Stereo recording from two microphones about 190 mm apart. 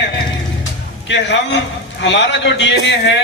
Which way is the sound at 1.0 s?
70° left (ahead or behind).